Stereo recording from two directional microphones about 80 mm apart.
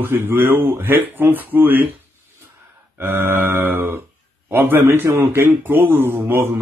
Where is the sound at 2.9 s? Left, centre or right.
Right.